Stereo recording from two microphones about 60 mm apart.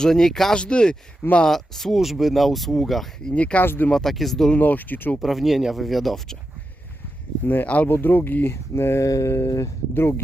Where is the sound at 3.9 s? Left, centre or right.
Centre.